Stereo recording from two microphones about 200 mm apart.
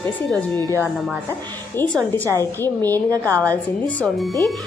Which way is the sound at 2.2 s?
15° right (ahead or behind).